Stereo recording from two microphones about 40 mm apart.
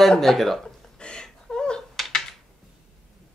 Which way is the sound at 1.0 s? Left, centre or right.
Left.